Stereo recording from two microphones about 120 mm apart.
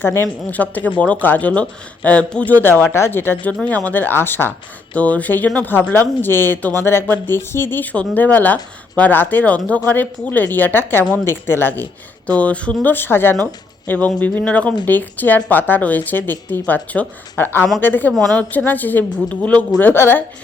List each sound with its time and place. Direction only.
0.0 s speech: 20° left (ahead or behind)
18.1 s a woman's voice: centre (ahead or behind)
18.5 s speech: 15° left (ahead or behind)